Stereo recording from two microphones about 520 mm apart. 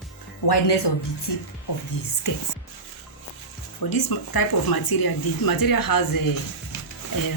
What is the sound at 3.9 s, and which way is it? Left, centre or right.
Speech, left.